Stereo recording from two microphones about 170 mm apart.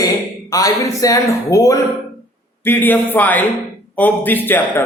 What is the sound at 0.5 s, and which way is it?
A man's voice, 20° left (ahead or behind).